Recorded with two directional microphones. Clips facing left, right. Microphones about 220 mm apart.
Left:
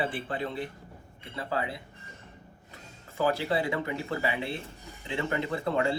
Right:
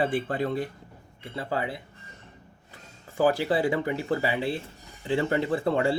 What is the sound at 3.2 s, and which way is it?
Speech, 30° right (ahead or behind).